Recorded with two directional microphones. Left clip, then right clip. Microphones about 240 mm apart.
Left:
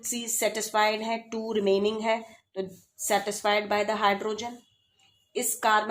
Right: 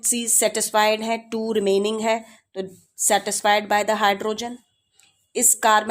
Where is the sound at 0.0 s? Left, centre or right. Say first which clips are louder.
Right 7 dB; right.